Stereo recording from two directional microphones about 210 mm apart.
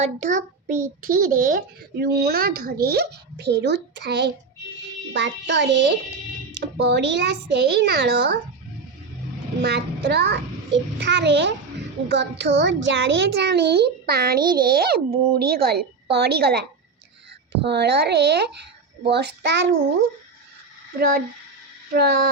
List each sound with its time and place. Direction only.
0.0 s a child's voice: 35° right (ahead or behind); by 8.4 s 50° right (ahead or behind)
9.6 s a child's voice: 55° right (ahead or behind)
21.9 s a child's voice: 50° right (ahead or behind)